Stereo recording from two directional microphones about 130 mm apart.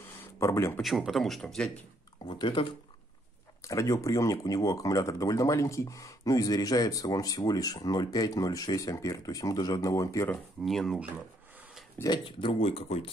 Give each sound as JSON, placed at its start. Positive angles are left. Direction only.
{"t": 0.4, "sound": "speech", "side_deg": 20}
{"t": 0.8, "sound": "speech", "side_deg": 0}
{"t": 2.2, "sound": "speech", "side_deg": 40}
{"t": 3.6, "sound": "speech", "side_deg": 25}
{"t": 10.3, "sound": "speech", "side_deg": 0}
{"t": 12.0, "sound": "speech", "side_deg": 35}